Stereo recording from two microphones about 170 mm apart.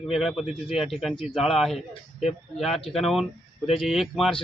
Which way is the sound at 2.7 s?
35° left (ahead or behind).